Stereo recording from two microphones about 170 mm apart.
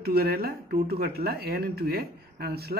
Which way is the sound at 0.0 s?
65° right (ahead or behind).